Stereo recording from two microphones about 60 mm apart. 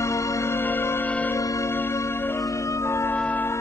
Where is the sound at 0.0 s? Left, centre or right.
Left.